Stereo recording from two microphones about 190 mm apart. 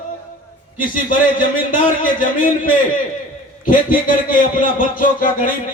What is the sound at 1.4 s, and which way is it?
A man's voice, 45° left (ahead or behind).